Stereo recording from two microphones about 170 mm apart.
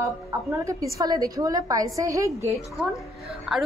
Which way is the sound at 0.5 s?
20° right (ahead or behind).